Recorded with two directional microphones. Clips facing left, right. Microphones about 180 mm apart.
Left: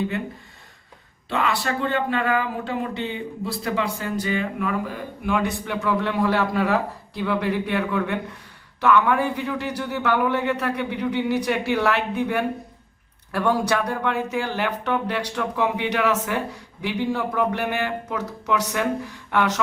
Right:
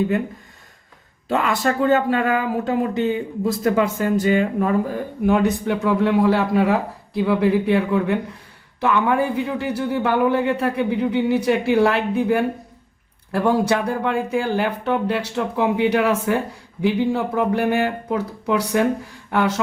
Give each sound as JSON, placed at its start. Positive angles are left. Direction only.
{"t": 1.3, "sound": "speech", "side_deg": -45}
{"t": 5.7, "sound": "a man's voice", "side_deg": -25}